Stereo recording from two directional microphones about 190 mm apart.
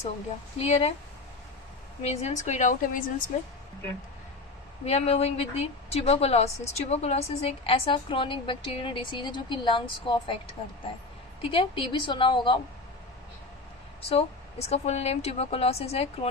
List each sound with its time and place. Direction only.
0.6 s a woman's voice: 35° left (ahead or behind)
2.0 s a woman's voice: 35° left (ahead or behind)
4.9 s a woman's voice: 35° left (ahead or behind)
11.5 s a woman's voice: 25° left (ahead or behind)
14.0 s a woman's voice: 35° left (ahead or behind)